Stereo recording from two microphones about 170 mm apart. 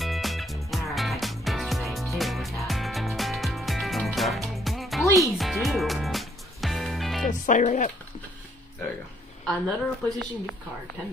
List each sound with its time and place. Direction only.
0.0 s music: centre (ahead or behind)
7.2 s speech: 50° left (ahead or behind)
9.5 s a woman's voice: centre (ahead or behind)